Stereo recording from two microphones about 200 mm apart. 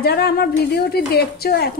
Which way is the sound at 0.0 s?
50° left (ahead or behind).